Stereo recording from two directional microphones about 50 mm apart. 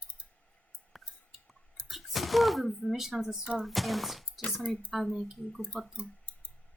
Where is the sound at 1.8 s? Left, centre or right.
Centre.